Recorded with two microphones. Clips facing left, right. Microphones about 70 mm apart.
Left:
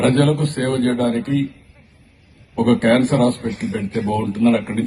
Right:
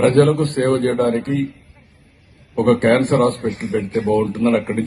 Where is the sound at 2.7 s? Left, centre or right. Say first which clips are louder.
Right 1 dB; right.